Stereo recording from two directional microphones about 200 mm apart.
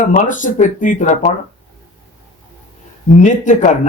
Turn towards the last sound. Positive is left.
turn(degrees=40)  # may be behind; listen again after turning